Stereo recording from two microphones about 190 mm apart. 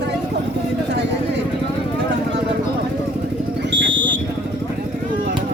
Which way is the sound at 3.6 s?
70° right (ahead or behind).